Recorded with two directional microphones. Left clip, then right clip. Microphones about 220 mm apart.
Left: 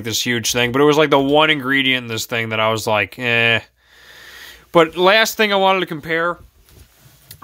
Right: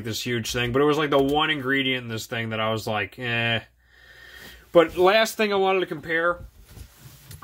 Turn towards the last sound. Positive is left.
turn(degrees=45)  # may be behind; listen again after turning